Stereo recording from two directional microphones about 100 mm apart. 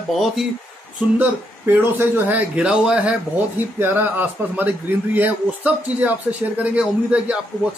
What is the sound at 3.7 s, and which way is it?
A man's voice, 20° right (ahead or behind).